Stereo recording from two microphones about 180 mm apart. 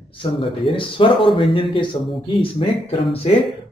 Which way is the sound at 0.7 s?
30° left (ahead or behind).